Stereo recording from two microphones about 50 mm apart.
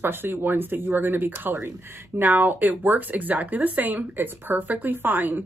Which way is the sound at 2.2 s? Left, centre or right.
Right.